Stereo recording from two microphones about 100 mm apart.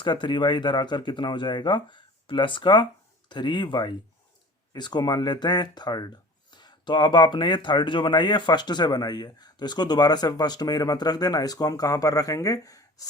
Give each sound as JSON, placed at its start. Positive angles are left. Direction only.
{"t": 0.0, "sound": "speech", "side_deg": 50}